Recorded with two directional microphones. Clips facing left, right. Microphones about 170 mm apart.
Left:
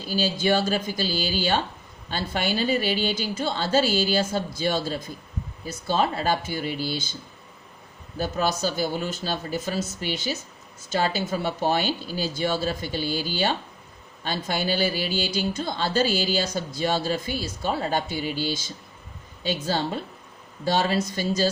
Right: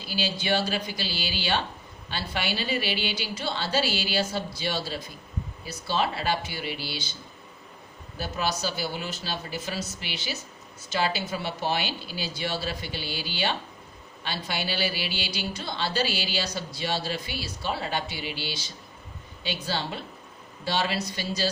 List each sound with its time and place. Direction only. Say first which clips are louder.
0.0 s speech: left 6 dB; 45° left (ahead or behind)
8.2 s speech: left 4 dB; 45° left (ahead or behind)